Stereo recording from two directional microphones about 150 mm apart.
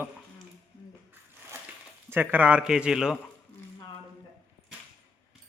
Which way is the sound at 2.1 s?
10° right (ahead or behind).